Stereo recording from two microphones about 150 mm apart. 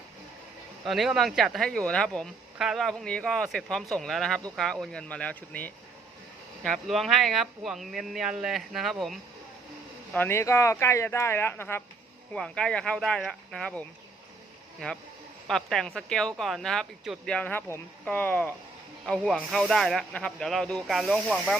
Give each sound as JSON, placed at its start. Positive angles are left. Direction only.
{"t": 0.9, "sound": "speech", "side_deg": 0}
{"t": 10.1, "sound": "speech", "side_deg": 15}